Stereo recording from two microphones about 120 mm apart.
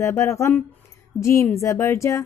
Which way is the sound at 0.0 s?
25° left (ahead or behind).